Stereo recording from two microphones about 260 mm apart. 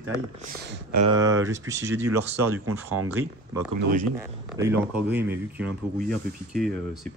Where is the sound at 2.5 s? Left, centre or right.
Right.